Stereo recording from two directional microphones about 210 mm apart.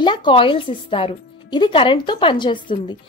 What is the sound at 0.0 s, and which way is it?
A woman's voice, 20° left (ahead or behind).